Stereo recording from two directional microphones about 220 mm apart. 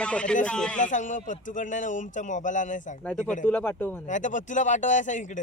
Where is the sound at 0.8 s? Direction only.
35° left (ahead or behind).